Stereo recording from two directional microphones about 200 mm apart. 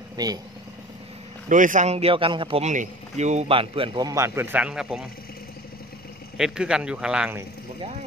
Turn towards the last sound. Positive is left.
turn(degrees=-5)  # may be behind; listen again after turning